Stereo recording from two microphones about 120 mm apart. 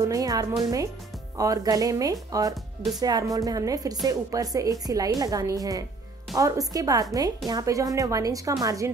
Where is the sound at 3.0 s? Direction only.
30° right (ahead or behind).